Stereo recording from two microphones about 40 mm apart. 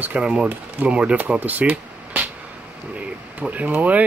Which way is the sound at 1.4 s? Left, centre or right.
Right.